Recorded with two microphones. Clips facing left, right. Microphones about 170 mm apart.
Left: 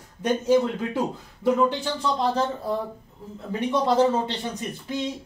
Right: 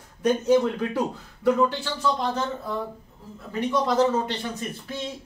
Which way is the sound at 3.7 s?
30° left (ahead or behind).